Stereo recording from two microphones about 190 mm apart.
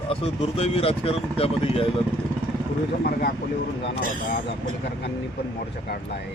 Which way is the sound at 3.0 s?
50° left (ahead or behind).